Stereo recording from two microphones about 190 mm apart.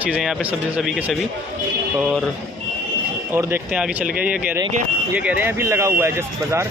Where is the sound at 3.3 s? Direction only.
10° right (ahead or behind).